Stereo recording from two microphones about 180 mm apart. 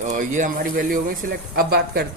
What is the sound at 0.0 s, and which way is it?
Speech, 45° right (ahead or behind).